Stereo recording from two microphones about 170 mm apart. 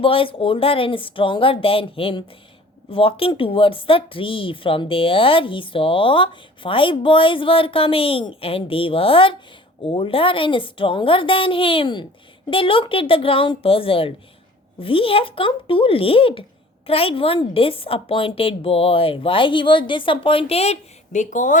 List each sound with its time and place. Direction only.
0.0 s a woman's voice: 30° left (ahead or behind); by 21.6 s 45° left (ahead or behind)